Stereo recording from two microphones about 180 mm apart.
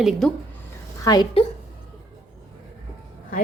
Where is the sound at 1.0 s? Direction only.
20° left (ahead or behind).